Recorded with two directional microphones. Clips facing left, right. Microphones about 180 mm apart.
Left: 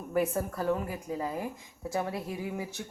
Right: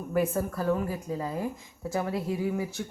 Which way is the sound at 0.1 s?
20° left (ahead or behind).